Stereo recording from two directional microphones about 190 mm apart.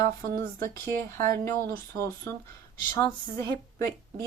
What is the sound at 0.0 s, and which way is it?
Speech, 50° right (ahead or behind).